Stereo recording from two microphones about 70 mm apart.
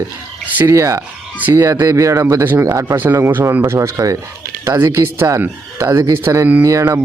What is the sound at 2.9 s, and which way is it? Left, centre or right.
Speech, right.